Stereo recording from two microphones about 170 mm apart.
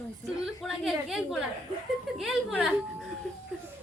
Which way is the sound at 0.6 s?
Centre (ahead or behind).